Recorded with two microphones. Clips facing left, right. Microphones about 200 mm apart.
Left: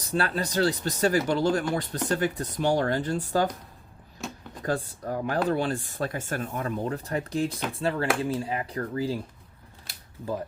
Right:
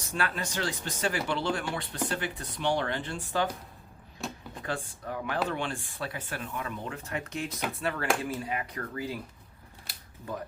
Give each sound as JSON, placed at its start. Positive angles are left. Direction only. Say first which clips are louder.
{"t": 0.1, "sound": "speech", "louder": "left 5 dB", "side_deg": 35}
{"t": 4.6, "sound": "speech", "louder": "left 7 dB", "side_deg": 40}